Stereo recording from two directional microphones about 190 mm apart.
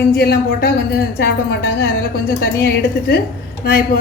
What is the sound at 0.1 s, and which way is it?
A woman's voice, 55° left (ahead or behind).